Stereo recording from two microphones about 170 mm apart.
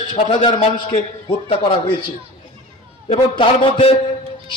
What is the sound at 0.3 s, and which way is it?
A man's voice, 30° left (ahead or behind).